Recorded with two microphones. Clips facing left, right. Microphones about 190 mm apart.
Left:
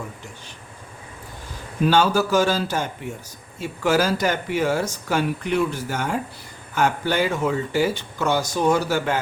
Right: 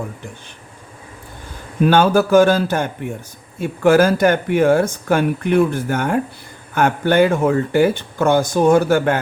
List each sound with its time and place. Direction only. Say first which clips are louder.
1.8 s speech: right 5 dB; 55° right (ahead or behind)